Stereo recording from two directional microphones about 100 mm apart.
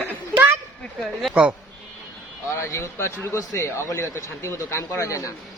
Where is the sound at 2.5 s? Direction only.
30° left (ahead or behind).